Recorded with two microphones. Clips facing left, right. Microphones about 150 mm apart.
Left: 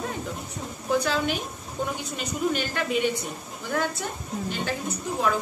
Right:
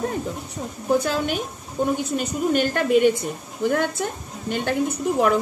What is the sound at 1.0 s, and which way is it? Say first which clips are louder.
A woman's voice: right 2 dB; 45° right (ahead or behind).